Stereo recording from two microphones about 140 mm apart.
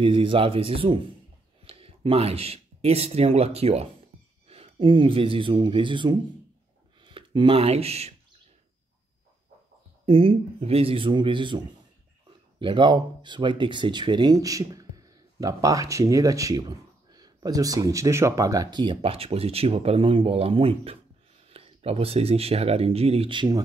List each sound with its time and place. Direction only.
0.0 s speech: 40° right (ahead or behind)
10.0 s speech: 40° right (ahead or behind)